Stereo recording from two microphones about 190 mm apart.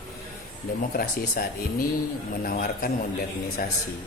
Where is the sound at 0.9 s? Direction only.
50° left (ahead or behind).